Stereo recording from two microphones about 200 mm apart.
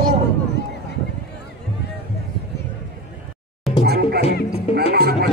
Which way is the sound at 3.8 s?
50° right (ahead or behind).